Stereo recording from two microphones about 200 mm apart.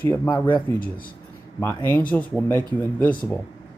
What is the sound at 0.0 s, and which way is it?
Speech, 10° left (ahead or behind).